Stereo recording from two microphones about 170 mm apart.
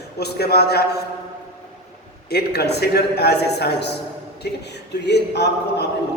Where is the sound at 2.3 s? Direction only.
70° left (ahead or behind).